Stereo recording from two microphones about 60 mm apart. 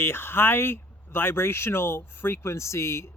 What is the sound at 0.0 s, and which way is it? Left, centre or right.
Speech, left.